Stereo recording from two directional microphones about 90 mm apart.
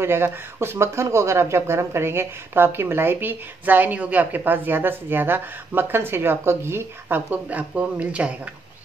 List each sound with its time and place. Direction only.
0.0 s speech: 25° right (ahead or behind)